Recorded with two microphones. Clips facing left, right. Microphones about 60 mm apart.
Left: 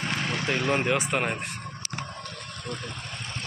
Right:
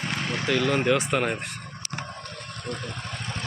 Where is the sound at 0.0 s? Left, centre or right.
Centre.